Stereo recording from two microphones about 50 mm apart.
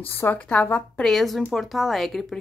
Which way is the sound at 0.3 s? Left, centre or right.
Left.